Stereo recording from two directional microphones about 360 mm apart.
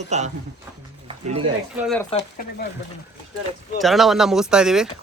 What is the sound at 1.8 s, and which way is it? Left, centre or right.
Speech, centre.